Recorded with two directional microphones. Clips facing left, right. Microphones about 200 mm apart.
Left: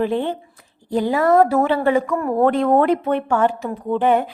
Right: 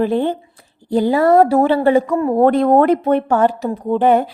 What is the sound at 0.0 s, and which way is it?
A woman's voice, 40° right (ahead or behind).